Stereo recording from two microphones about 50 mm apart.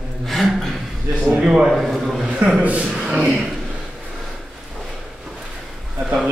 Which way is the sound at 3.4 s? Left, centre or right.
Centre.